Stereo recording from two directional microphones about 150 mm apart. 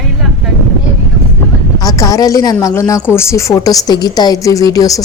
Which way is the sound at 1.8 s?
20° left (ahead or behind).